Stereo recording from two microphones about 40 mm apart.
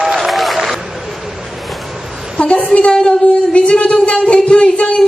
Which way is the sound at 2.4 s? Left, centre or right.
Left.